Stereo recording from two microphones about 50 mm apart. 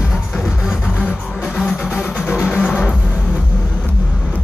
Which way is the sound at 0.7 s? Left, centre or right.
Centre.